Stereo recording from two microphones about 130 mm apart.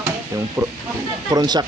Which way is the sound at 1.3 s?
30° right (ahead or behind).